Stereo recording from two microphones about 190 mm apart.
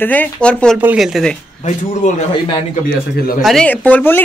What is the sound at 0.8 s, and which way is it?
Speech, 5° right (ahead or behind).